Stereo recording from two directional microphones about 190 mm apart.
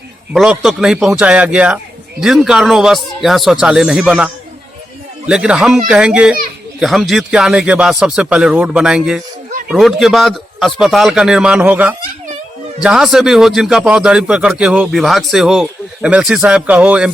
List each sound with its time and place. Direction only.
0.3 s a man's voice: centre (ahead or behind)
5.3 s a man's voice: 5° right (ahead or behind)